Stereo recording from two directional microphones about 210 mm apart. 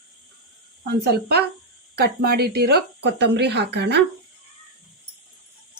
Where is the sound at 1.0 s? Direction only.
50° right (ahead or behind).